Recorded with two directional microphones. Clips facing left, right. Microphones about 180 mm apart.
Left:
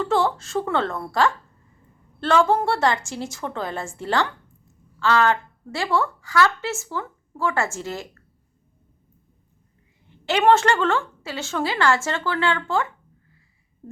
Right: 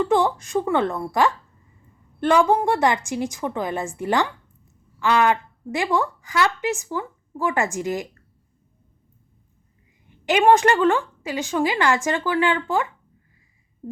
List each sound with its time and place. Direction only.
0.0 s a woman's voice: 15° right (ahead or behind)
10.1 s a woman's voice: 15° right (ahead or behind)